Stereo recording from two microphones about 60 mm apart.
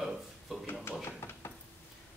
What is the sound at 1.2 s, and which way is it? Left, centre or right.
Dishes, left.